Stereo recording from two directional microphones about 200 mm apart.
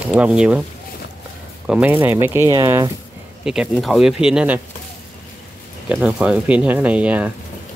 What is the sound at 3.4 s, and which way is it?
Speech, 5° right (ahead or behind).